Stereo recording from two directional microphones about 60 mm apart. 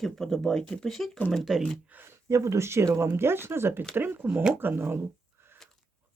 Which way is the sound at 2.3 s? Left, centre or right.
Right.